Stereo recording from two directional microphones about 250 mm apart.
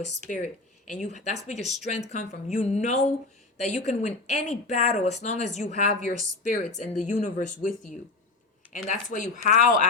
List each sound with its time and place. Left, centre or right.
0.0 s speech: left
8.7 s speech: left